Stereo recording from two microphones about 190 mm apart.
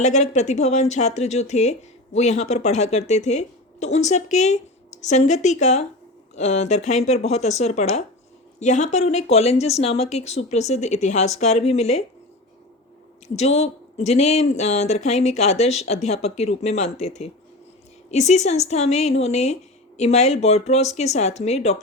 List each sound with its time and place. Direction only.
0.0 s speech: 40° left (ahead or behind)
13.2 s speech: 35° left (ahead or behind)